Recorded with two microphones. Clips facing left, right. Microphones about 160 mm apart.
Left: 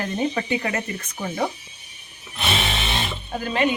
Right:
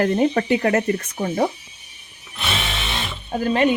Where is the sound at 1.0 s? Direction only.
40° right (ahead or behind).